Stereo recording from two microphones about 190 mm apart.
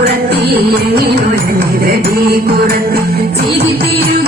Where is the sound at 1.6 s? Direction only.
55° right (ahead or behind).